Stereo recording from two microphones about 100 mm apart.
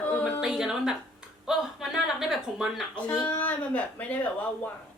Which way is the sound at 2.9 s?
15° left (ahead or behind).